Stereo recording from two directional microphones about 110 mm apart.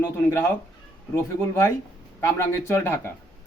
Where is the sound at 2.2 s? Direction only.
20° left (ahead or behind).